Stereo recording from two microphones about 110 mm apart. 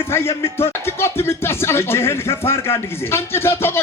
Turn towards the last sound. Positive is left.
turn(degrees=20)  # may be behind; listen again after turning